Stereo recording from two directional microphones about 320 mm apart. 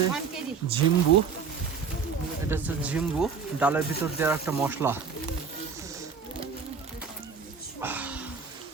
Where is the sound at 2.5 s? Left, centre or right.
Centre.